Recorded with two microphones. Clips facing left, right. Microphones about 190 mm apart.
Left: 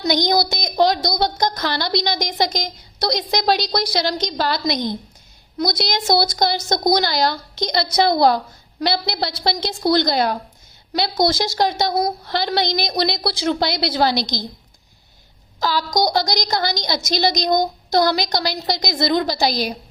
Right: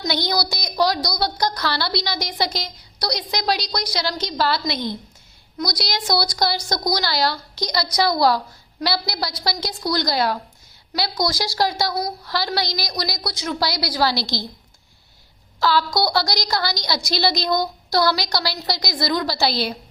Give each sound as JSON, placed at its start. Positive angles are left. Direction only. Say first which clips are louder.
{"t": 0.1, "sound": "a woman's voice", "louder": "left 6 dB", "side_deg": 20}
{"t": 15.6, "sound": "a woman's voice", "louder": "even", "side_deg": 20}